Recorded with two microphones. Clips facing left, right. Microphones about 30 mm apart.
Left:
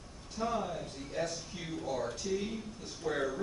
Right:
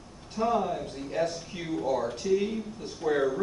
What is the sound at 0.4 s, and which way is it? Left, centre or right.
Speech, right.